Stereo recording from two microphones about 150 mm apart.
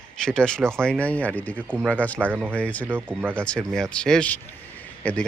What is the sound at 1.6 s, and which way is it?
Speech, 10° right (ahead or behind).